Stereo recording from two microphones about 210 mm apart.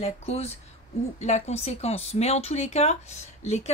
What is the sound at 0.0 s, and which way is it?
Speech, 30° left (ahead or behind).